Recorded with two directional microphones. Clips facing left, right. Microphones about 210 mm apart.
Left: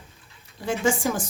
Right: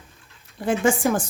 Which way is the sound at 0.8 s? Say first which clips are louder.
Right 2 dB; 55° right (ahead or behind).